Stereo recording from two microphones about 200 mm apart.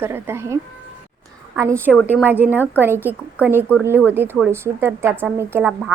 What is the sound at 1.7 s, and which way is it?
Speech, 10° left (ahead or behind).